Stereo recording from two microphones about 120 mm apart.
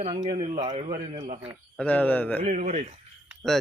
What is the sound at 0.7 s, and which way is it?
Speech, 60° right (ahead or behind).